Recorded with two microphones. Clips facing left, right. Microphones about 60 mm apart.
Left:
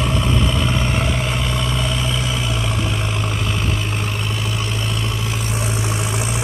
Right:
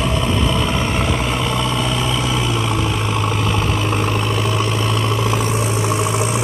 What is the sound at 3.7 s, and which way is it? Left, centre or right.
Vehicle, right.